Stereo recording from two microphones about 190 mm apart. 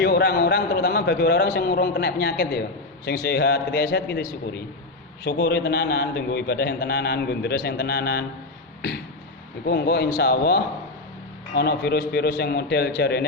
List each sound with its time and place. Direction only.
0.0 s a man's voice: 60° left (ahead or behind)
5.2 s a man's voice: 55° left (ahead or behind)
9.6 s a man's voice: 60° left (ahead or behind)